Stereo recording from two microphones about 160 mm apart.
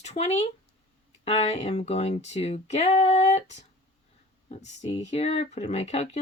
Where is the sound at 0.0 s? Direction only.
45° left (ahead or behind).